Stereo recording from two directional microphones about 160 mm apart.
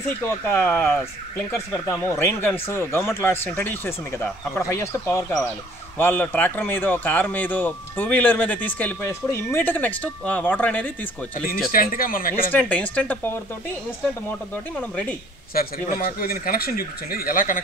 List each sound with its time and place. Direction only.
0.3 s speech: 15° left (ahead or behind)
11.7 s speech: 65° left (ahead or behind)
12.4 s speech: 10° left (ahead or behind)
14.8 s speech: 10° left (ahead or behind)
15.5 s speech: 65° left (ahead or behind)